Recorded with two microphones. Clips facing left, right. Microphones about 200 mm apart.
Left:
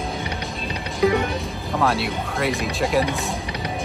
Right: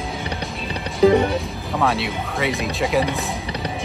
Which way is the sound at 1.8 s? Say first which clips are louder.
Even; centre (ahead or behind).